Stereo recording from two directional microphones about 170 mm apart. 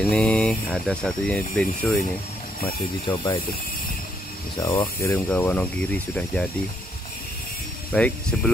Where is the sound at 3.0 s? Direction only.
25° left (ahead or behind).